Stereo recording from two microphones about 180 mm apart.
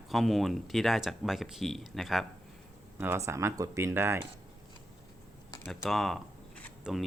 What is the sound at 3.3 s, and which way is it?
Speech, 15° right (ahead or behind).